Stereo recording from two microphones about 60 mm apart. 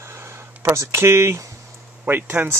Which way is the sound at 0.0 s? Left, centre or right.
Right.